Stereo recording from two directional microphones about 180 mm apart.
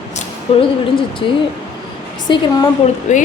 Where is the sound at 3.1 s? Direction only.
40° left (ahead or behind).